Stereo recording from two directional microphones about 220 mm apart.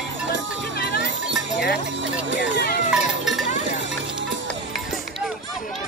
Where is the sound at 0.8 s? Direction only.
45° left (ahead or behind).